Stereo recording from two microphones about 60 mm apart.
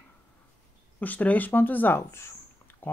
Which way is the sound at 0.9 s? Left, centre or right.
Left.